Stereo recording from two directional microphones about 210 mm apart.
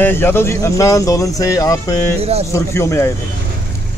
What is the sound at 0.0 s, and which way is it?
Speech, 10° left (ahead or behind).